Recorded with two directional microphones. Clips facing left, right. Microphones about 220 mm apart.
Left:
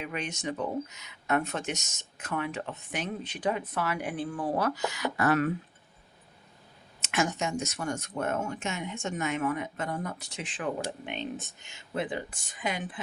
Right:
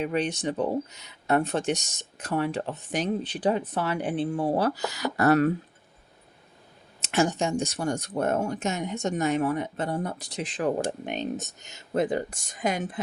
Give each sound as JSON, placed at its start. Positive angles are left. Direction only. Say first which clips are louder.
{"t": 0.0, "sound": "speech", "louder": "right 8 dB", "side_deg": -35}
{"t": 7.0, "sound": "speech", "louder": "right 5 dB", "side_deg": -35}